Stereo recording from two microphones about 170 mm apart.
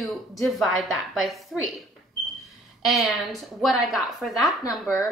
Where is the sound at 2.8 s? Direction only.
Centre (ahead or behind).